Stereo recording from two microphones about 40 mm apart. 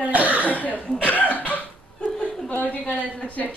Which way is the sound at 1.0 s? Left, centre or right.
Left.